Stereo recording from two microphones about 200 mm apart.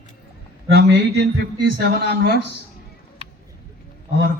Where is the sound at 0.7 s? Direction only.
55° right (ahead or behind).